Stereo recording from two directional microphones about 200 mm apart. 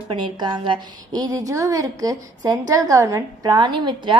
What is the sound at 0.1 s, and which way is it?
A woman's voice, 25° right (ahead or behind).